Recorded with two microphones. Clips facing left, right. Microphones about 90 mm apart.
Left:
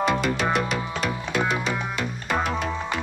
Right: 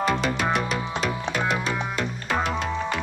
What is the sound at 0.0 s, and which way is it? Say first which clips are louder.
Music: left 1 dB; centre (ahead or behind).